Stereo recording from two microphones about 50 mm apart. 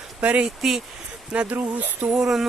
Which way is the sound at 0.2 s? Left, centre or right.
Right.